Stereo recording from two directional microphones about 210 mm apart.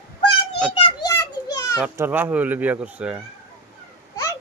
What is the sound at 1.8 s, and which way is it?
Speech, 10° right (ahead or behind).